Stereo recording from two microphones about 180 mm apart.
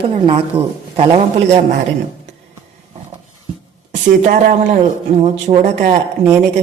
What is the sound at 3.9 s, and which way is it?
Speech, 45° right (ahead or behind).